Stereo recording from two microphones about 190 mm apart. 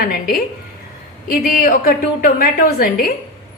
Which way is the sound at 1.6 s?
50° left (ahead or behind).